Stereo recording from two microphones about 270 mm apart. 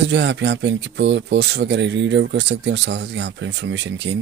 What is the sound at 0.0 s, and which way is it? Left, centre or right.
Speech, right.